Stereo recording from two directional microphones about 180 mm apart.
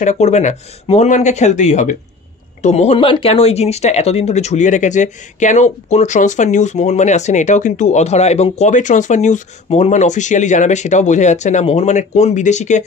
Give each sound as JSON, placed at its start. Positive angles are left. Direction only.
{"t": 0.0, "sound": "speech", "side_deg": 40}